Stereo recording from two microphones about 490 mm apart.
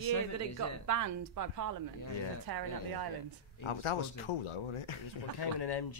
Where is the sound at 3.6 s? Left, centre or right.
Left.